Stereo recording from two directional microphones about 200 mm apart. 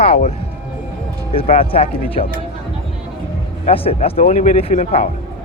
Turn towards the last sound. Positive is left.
turn(degrees=35)  # may be behind; listen again after turning